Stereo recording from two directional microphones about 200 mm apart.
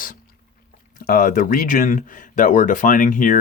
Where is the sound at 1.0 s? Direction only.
45° left (ahead or behind).